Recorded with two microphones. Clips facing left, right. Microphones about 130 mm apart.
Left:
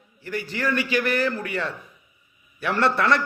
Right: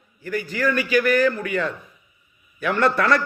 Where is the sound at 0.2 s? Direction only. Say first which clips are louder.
Right 4 dB; 25° left (ahead or behind).